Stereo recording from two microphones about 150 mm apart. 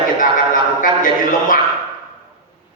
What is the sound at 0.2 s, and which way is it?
Music, 65° left (ahead or behind).